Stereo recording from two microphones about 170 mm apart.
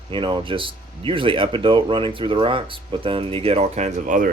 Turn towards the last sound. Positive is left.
turn(degrees=-50)  # may be behind; listen again after turning